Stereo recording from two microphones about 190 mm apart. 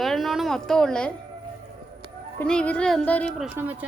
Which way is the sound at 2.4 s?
5° left (ahead or behind).